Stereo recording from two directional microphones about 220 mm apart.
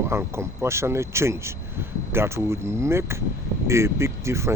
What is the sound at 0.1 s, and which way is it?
Speech, 10° right (ahead or behind).